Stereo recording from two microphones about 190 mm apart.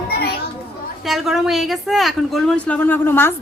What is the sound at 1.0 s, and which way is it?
A woman's voice, centre (ahead or behind).